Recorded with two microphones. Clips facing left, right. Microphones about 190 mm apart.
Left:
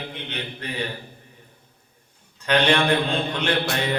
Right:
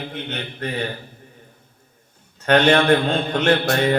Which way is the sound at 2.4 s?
50° right (ahead or behind).